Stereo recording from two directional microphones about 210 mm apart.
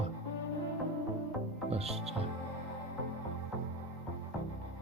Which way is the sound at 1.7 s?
30° right (ahead or behind).